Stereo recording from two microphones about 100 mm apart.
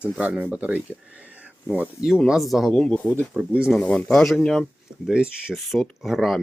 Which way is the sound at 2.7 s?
10° left (ahead or behind).